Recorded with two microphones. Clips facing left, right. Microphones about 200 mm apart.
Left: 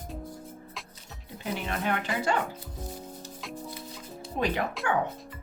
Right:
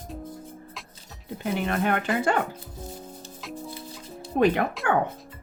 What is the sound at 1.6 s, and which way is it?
Speech, 55° right (ahead or behind).